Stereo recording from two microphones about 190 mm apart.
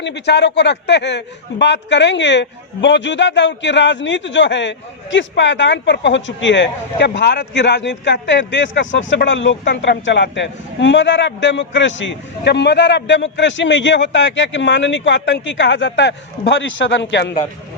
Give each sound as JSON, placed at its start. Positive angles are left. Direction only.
{"t": 0.0, "sound": "speech", "side_deg": 65}